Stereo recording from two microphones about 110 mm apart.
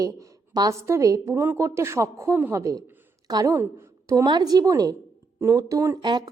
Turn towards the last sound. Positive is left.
turn(degrees=-45)  # may be behind; listen again after turning